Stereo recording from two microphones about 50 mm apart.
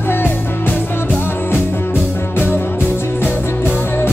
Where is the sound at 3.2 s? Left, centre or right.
Left.